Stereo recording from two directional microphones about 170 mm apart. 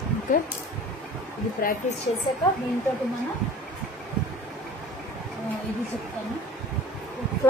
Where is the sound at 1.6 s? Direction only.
60° left (ahead or behind).